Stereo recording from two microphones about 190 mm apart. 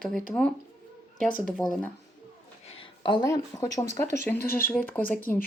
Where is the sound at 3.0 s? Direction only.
20° left (ahead or behind).